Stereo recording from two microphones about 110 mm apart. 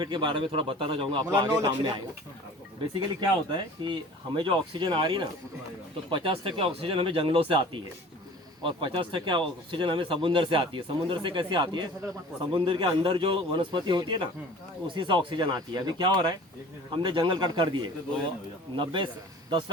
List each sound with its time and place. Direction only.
0.0 s speech: 45° right (ahead or behind)
1.2 s a man's voice: 35° right (ahead or behind)
3.2 s a man's voice: 45° right (ahead or behind)